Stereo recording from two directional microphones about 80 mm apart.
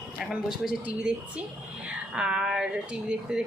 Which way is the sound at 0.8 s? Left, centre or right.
Centre.